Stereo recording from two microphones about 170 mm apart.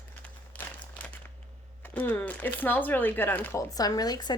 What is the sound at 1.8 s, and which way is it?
Speech, 10° left (ahead or behind).